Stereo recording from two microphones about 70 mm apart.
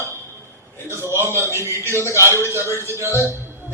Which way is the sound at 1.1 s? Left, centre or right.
Right.